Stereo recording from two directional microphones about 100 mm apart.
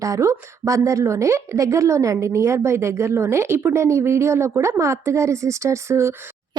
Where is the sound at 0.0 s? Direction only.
30° right (ahead or behind).